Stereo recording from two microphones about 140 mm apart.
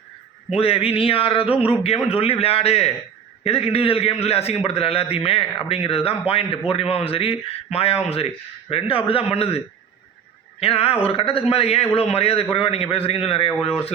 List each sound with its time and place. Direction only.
0.5 s a man's voice: 45° left (ahead or behind)
10.6 s a man's voice: 45° left (ahead or behind)